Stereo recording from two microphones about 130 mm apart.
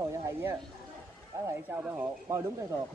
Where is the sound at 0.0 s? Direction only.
25° right (ahead or behind).